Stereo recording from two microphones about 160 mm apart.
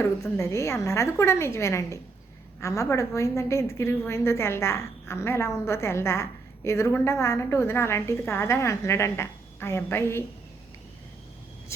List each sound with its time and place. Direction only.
0.0 s a woman's voice: 20° left (ahead or behind)